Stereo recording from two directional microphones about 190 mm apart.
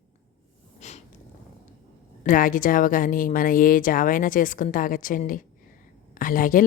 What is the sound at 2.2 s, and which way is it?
Speech, 45° left (ahead or behind).